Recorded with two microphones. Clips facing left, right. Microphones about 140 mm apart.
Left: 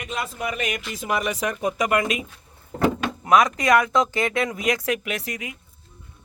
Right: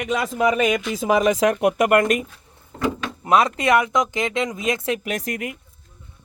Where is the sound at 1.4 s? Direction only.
80° right; by 2.2 s 50° right (ahead or behind).